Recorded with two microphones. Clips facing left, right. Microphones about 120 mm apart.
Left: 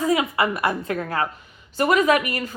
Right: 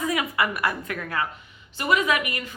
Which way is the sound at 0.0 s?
25° left (ahead or behind).